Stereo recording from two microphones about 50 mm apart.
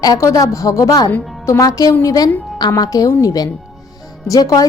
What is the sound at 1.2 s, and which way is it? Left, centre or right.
Music, centre.